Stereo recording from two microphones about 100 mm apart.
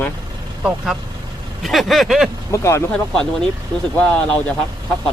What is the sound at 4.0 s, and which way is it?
Speech, 15° left (ahead or behind).